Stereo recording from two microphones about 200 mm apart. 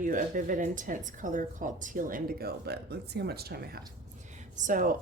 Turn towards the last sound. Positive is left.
turn(degrees=-45)  # may be behind; listen again after turning